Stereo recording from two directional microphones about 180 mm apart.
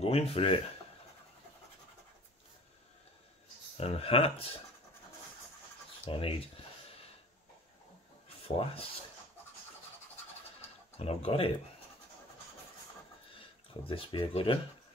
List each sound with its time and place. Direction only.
0.0 s speech: 35° left (ahead or behind)
3.7 s speech: 35° left (ahead or behind)
6.0 s speech: 30° left (ahead or behind)
8.5 s speech: 30° left (ahead or behind)
11.0 s speech: 35° left (ahead or behind)
13.8 s speech: 30° left (ahead or behind)